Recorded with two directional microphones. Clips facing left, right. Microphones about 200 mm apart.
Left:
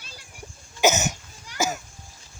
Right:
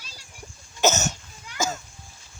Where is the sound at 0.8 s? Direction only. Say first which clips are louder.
Left 1 dB; 15° left (ahead or behind).